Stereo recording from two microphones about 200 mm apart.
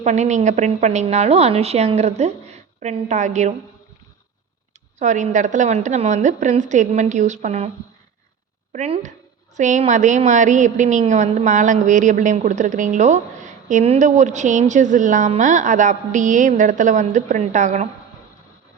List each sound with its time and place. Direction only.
0.0 s a woman's voice: 35° right (ahead or behind)
4.9 s a woman's voice: 35° right (ahead or behind)
8.7 s a woman's voice: 35° right (ahead or behind)